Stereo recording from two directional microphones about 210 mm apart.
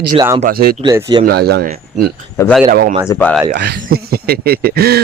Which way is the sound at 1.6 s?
35° right (ahead or behind).